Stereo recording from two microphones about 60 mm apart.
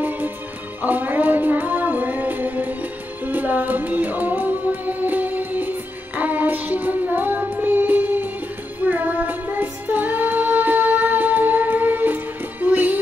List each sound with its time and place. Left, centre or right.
0.8 s music: right
8.8 s child singing: right